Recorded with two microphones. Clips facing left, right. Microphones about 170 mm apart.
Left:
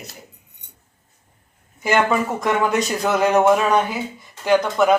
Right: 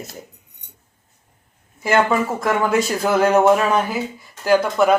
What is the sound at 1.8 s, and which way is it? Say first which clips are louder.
A man's voice: right 1 dB; 5° right (ahead or behind).